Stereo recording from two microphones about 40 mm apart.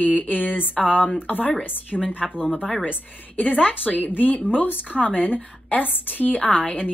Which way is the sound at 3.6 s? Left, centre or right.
Left.